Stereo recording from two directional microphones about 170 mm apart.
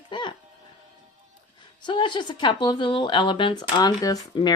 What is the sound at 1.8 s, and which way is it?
A woman's voice, 30° left (ahead or behind).